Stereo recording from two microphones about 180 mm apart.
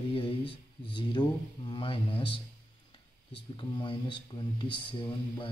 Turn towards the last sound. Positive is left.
turn(degrees=30)  # may be behind; listen again after turning